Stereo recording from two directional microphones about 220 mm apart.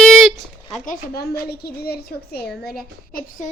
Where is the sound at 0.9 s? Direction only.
45° left (ahead or behind).